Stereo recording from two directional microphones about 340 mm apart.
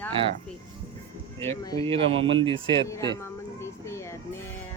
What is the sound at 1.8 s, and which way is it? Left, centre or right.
Speech, centre.